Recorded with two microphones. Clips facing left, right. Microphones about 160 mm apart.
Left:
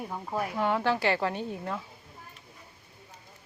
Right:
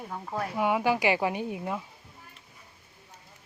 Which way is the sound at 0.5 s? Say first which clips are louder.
Right 2 dB; 10° right (ahead or behind).